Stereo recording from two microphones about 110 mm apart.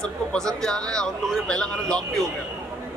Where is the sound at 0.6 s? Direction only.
5° left (ahead or behind).